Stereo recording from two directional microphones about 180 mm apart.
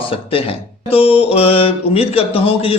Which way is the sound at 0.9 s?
30° left (ahead or behind).